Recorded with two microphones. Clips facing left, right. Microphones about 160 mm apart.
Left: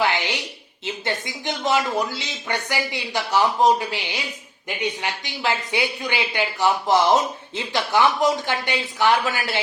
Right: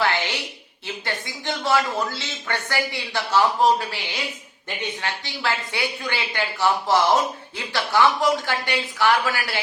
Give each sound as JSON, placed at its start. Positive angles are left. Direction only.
{"t": 0.0, "sound": "a woman's voice", "side_deg": 15}